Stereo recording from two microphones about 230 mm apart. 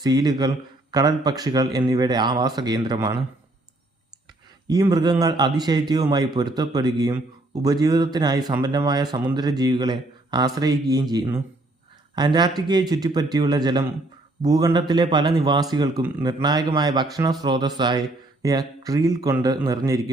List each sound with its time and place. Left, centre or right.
0.0 s speech: centre
4.7 s a man's voice: centre